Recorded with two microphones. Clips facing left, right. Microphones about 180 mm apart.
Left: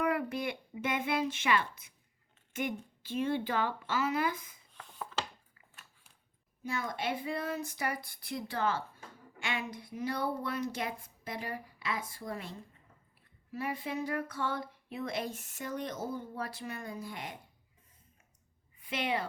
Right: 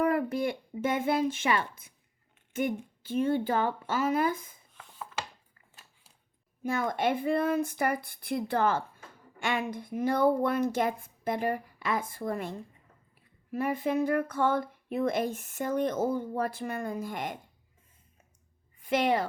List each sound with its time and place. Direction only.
0.0 s a sound: 45° right (ahead or behind)
0.8 s speech: 50° right (ahead or behind)
4.8 s ratchet: 5° right (ahead or behind)
6.6 s speech: 55° right (ahead or behind)
18.9 s speech: 45° right (ahead or behind)